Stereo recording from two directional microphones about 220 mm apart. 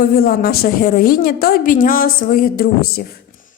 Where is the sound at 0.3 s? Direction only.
45° left (ahead or behind).